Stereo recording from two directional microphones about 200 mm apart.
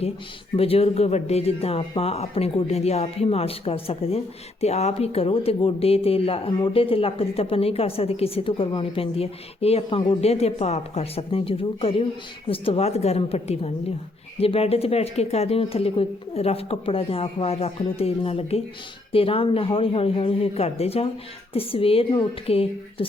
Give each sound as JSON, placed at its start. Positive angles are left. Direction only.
{"t": 0.5, "sound": "a woman's voice", "side_deg": 30}